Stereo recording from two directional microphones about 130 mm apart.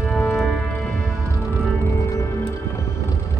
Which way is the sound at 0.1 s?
Centre (ahead or behind).